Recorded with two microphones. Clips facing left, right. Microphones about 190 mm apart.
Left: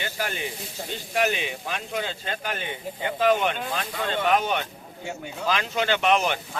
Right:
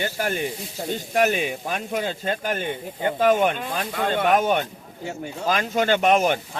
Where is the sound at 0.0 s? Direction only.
45° right (ahead or behind).